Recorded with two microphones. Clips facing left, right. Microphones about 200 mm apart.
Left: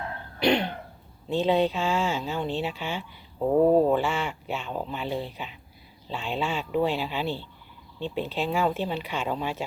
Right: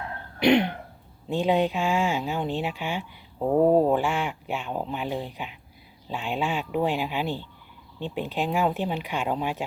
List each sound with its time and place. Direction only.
0.3 s throat clearing: 20° right (ahead or behind)
1.3 s speech: 15° right (ahead or behind)